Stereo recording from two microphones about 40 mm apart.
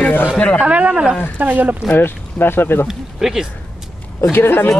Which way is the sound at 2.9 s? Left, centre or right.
Centre.